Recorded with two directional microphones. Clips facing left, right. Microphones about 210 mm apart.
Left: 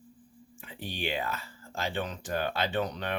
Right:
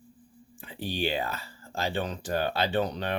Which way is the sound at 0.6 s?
35° right (ahead or behind).